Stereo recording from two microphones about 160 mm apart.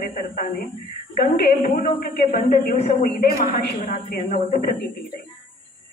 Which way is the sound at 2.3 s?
45° left (ahead or behind).